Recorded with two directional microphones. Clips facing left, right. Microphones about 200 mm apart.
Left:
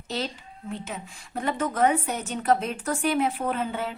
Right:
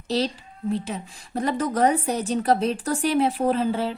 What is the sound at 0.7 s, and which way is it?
A woman's voice, 35° right (ahead or behind).